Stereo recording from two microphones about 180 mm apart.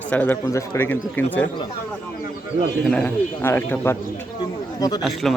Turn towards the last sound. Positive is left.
turn(degrees=0)  # may be behind; listen again after turning